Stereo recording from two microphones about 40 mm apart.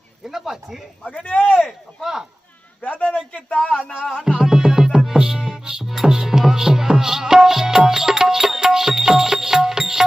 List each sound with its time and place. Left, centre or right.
0.3 s speech: centre
1.1 s speech: left
2.8 s a sound: left
3.3 s speech: left
4.3 s music: centre